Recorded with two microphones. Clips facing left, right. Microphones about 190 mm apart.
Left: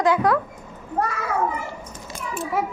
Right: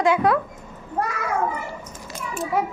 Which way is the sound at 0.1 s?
25° right (ahead or behind).